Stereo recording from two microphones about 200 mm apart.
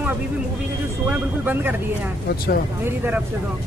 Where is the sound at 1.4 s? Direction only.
10° right (ahead or behind).